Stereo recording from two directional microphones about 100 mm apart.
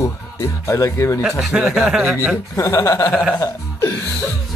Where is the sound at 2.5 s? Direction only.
30° left (ahead or behind).